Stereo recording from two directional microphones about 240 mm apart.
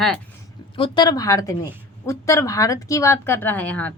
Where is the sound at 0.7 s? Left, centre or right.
Left.